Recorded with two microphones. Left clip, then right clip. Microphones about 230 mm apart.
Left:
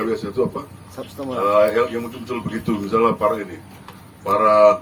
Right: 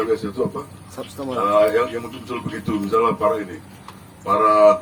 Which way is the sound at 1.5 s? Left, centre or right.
Left.